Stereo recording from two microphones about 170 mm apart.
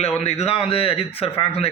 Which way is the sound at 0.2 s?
40° left (ahead or behind).